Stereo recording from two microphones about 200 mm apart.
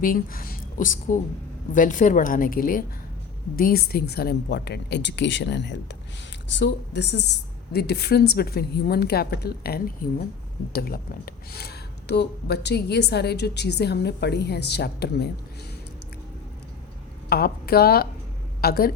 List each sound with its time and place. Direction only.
0.0 s a woman's voice: 45° left (ahead or behind)
17.2 s a woman's voice: 50° left (ahead or behind)